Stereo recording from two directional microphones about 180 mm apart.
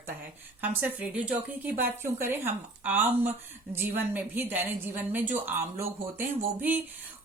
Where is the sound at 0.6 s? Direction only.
10° right (ahead or behind).